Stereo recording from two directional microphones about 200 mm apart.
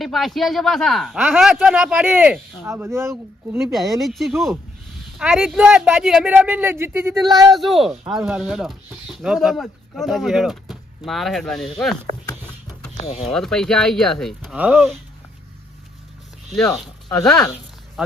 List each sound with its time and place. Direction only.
0.0 s speech: centre (ahead or behind)
3.8 s speech: centre (ahead or behind)
7.5 s speech: centre (ahead or behind)
13.0 s speech: 30° left (ahead or behind)
13.2 s speech: centre (ahead or behind)
16.5 s speech: 5° left (ahead or behind)